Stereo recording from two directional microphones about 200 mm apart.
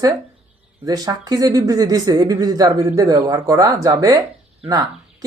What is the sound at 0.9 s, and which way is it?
Speech, 20° right (ahead or behind).